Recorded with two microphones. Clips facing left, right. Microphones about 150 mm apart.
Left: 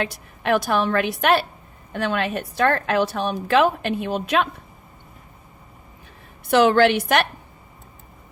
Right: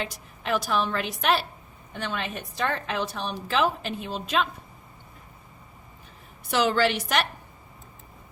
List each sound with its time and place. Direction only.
0.4 s a woman's voice: 60° left (ahead or behind)
6.5 s a woman's voice: 55° left (ahead or behind)